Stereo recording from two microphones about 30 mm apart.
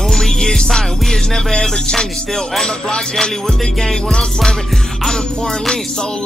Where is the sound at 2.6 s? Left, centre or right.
Left.